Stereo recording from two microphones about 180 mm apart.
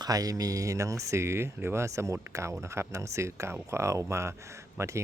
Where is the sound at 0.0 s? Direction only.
20° right (ahead or behind).